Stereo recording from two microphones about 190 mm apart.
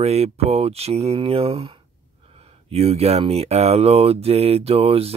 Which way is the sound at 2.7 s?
35° right (ahead or behind).